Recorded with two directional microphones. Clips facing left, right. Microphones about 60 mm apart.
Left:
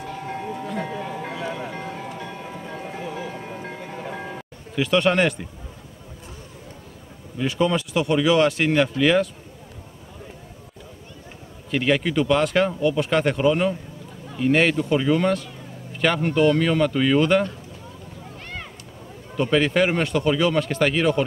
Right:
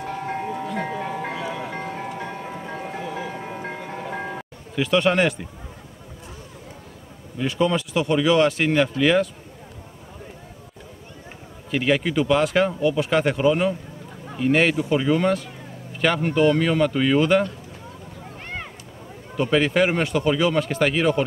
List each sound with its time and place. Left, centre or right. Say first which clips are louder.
0.0 s music: right 3 dB; right
3.0 s music: right 1 dB; right
4.7 s speech: even; centre
7.3 s speech: even; centre
11.7 s speech: even; centre
18.4 s a sound: right 3 dB; right
19.3 s speech: even; centre